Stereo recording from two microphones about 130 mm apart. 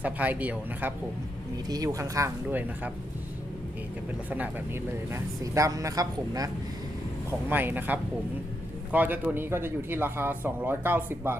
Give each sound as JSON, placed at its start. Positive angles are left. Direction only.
{"t": 0.0, "sound": "speech", "side_deg": -10}
{"t": 1.6, "sound": "speech", "side_deg": -30}
{"t": 2.5, "sound": "speech", "side_deg": -15}
{"t": 4.3, "sound": "speech", "side_deg": -15}
{"t": 7.5, "sound": "speech", "side_deg": -15}